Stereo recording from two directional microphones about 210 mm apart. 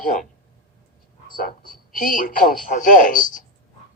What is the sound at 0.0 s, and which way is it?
Speech, 40° left (ahead or behind).